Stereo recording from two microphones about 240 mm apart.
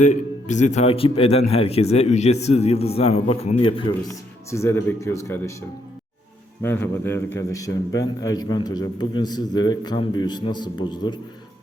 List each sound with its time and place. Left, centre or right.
0.0 s speech: left
4.5 s a man's voice: centre
6.6 s a man's voice: centre